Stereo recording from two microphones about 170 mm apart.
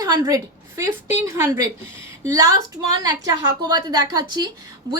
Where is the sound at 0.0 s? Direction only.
20° right (ahead or behind).